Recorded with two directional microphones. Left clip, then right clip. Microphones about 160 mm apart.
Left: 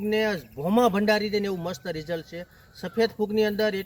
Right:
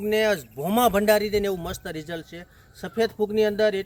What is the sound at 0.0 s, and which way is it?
Speech, 25° right (ahead or behind).